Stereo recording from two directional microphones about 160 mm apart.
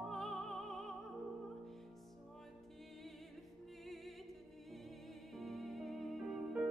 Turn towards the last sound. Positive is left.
turn(degrees=0)  # may be behind; listen again after turning